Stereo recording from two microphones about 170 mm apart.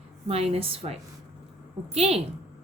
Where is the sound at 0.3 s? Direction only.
35° right (ahead or behind).